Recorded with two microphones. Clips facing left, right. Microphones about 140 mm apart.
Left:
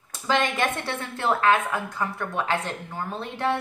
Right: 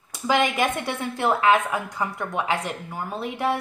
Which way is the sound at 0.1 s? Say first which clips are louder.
Right 2 dB; 10° right (ahead or behind).